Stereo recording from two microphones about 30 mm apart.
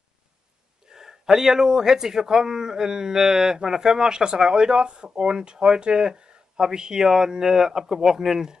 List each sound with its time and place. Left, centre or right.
0.8 s speech: centre